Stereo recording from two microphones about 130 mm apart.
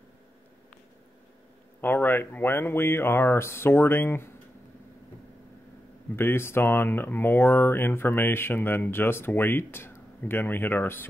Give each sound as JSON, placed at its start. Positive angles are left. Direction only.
{"t": 1.8, "sound": "speech", "side_deg": 15}
{"t": 6.1, "sound": "speech", "side_deg": 20}